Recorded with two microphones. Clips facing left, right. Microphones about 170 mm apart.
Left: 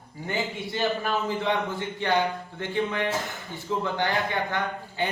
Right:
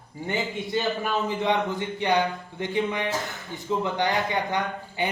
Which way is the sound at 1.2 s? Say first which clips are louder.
Right 2 dB; 20° right (ahead or behind).